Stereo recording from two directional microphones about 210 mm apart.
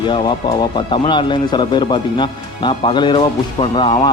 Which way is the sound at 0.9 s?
25° left (ahead or behind).